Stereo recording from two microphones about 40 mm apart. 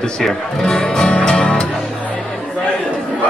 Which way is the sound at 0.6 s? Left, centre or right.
Centre.